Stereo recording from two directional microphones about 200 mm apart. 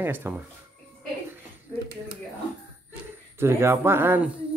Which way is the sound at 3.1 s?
10° right (ahead or behind).